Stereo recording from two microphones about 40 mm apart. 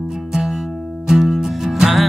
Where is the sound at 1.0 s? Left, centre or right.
Centre.